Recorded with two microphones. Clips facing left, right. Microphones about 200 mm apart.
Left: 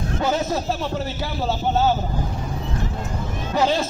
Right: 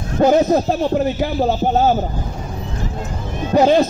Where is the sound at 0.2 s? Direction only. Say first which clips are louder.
Right 11 dB; 45° right (ahead or behind).